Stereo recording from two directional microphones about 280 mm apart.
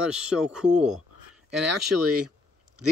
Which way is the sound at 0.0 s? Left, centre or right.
Centre.